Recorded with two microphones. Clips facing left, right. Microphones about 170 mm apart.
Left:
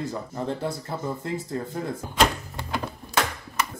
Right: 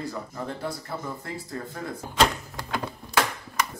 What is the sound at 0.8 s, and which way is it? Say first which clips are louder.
Speech: left 4 dB; 20° left (ahead or behind).